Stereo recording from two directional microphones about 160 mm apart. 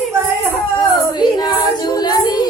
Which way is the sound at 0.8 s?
25° left (ahead or behind).